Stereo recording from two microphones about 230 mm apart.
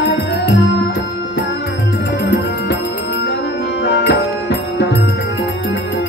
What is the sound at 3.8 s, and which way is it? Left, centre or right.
Music, left.